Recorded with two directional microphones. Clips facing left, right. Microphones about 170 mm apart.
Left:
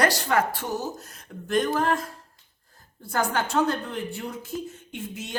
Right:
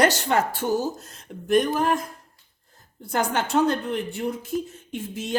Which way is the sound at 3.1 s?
20° right (ahead or behind).